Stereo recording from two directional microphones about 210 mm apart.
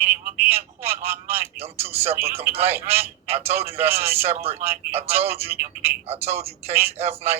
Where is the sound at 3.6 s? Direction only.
10° right (ahead or behind).